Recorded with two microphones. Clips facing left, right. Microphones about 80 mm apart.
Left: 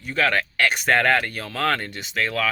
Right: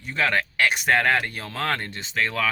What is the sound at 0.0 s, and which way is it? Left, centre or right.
Speech, right.